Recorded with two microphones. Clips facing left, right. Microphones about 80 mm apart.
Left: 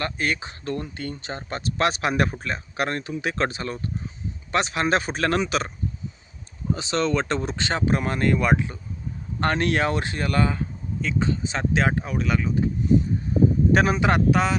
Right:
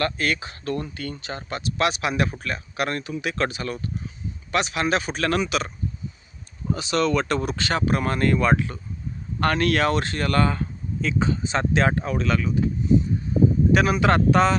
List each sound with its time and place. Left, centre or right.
0.0 s speech: left
2.3 s speech: left
6.7 s speech: left; by 10.7 s centre
11.0 s speech: centre
12.4 s speech: left
13.7 s speech: left
14.3 s speech: centre